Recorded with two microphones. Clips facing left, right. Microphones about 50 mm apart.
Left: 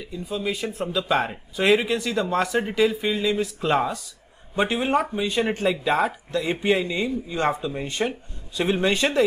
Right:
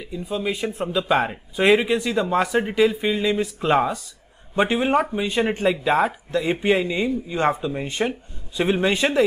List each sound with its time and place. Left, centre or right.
0.0 s speech: centre